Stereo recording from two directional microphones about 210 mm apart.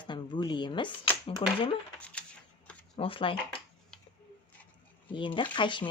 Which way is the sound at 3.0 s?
25° left (ahead or behind).